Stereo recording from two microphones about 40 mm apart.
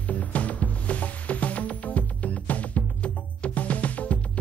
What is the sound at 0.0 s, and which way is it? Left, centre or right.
Music, left.